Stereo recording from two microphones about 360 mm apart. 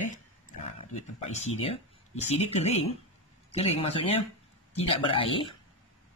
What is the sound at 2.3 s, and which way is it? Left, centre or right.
Speech, centre.